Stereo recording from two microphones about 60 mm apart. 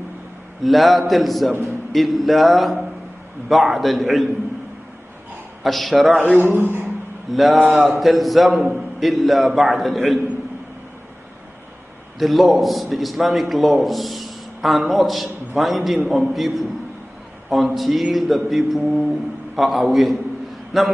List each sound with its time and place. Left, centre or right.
0.7 s a man's voice: centre
1.5 s a man's voice: right
1.9 s a man's voice: centre
5.6 s a man's voice: centre
6.4 s a man's voice: right
7.3 s a man's voice: centre
12.2 s a man's voice: centre